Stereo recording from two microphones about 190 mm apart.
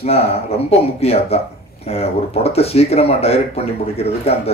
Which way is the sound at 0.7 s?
35° left (ahead or behind).